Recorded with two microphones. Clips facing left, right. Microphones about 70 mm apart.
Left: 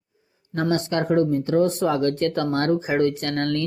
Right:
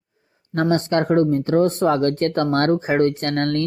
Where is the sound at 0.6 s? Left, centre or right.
Right.